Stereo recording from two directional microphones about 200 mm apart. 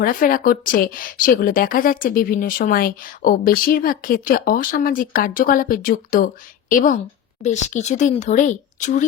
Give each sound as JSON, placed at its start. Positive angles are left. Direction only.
{"t": 0.0, "sound": "a woman's voice", "side_deg": 45}